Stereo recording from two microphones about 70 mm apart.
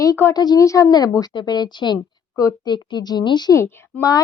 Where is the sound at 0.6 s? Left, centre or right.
Left.